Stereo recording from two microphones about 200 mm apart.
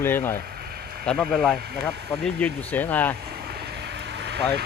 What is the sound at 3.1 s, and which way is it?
Vehicle, 50° right (ahead or behind).